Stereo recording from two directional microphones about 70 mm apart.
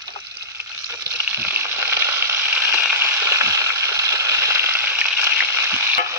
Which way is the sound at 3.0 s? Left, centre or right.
Right.